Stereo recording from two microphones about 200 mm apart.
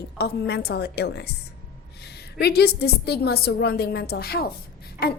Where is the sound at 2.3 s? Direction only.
55° left (ahead or behind).